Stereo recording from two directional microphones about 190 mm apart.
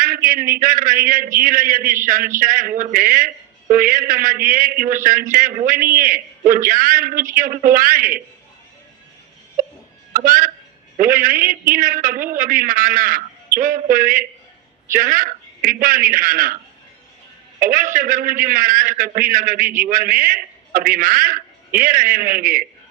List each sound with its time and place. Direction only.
0.0 s a man's voice: 45° right (ahead or behind)
10.1 s a man's voice: 45° right (ahead or behind)
17.6 s a man's voice: 45° right (ahead or behind)